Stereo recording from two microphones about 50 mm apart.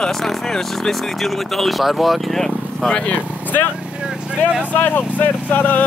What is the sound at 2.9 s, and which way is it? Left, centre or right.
Speech, left.